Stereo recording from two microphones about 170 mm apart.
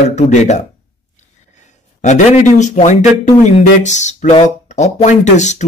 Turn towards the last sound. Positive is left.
turn(degrees=45)  # may be behind; listen again after turning